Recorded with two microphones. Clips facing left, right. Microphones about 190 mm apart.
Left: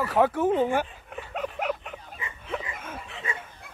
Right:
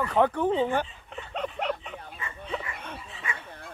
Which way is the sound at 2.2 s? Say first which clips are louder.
Even; 15° left (ahead or behind).